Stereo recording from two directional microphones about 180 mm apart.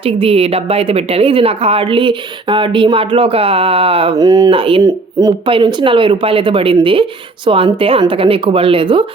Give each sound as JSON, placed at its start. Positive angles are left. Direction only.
{"t": 0.0, "sound": "speech", "side_deg": -30}